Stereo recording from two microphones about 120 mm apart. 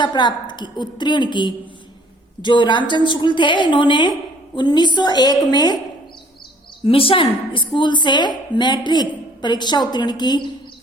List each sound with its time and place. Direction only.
0.0 s a woman's voice: 40° left (ahead or behind)
6.8 s a woman's voice: 50° left (ahead or behind)